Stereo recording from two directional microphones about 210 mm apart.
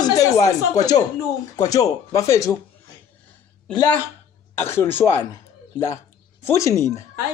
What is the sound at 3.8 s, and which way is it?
Speech, 10° left (ahead or behind).